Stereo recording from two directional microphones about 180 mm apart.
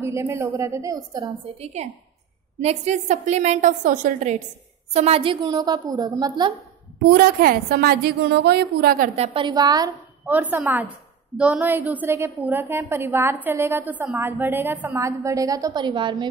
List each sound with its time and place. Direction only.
0.0 s a woman's voice: 15° right (ahead or behind)
1.6 s a woman's voice: 40° right (ahead or behind)
4.9 s a woman's voice: 35° right (ahead or behind)
7.1 s a woman's voice: 55° right (ahead or behind)
9.1 s a woman's voice: 30° right (ahead or behind)
10.2 s a woman's voice: 10° right (ahead or behind); by 16.3 s 25° right (ahead or behind)